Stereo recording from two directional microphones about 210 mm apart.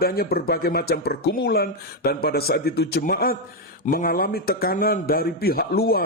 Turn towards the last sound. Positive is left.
turn(degrees=45)  # may be behind; listen again after turning